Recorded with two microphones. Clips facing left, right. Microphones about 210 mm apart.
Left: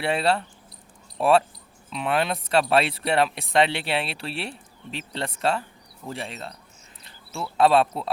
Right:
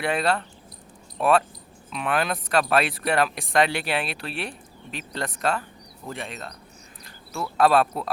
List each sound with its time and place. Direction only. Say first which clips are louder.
0.0 s speech: left 1 dB; 30° left (ahead or behind)
7.5 s speech: left 1 dB; 25° left (ahead or behind)